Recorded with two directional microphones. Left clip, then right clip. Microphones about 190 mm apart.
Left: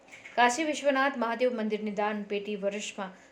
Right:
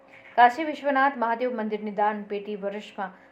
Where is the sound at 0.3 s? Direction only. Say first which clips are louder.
Right 6 dB; 35° left (ahead or behind).